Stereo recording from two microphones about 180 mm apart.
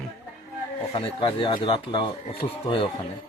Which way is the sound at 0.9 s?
30° left (ahead or behind).